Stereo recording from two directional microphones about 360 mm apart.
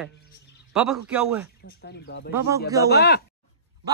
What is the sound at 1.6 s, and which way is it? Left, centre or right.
Speech, left.